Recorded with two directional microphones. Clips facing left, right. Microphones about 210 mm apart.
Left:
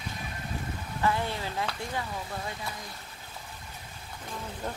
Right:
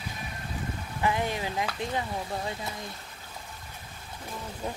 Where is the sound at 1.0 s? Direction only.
15° right (ahead or behind).